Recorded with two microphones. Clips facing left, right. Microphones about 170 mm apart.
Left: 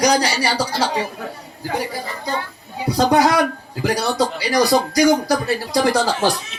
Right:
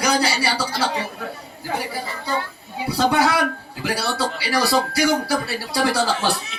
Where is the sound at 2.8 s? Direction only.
40° left (ahead or behind).